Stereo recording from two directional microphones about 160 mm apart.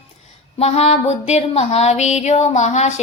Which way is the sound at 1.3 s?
40° left (ahead or behind).